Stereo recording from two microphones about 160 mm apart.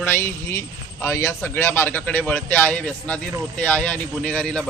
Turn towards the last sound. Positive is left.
turn(degrees=5)  # may be behind; listen again after turning